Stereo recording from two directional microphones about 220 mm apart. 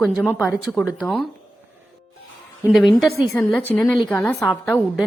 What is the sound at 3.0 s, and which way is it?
A woman's voice, 5° left (ahead or behind).